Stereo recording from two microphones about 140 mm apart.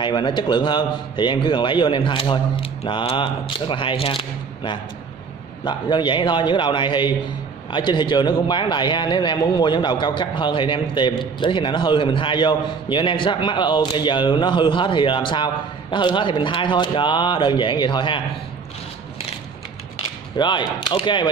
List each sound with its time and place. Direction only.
0.0 s a man's voice: 35° left (ahead or behind)
20.3 s a man's voice: 35° left (ahead or behind)